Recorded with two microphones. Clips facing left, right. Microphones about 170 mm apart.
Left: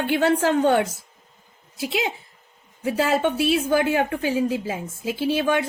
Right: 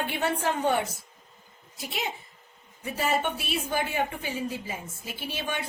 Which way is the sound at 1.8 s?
90° left.